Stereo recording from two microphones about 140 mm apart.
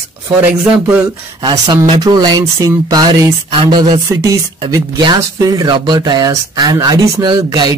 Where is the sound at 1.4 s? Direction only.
30° right (ahead or behind).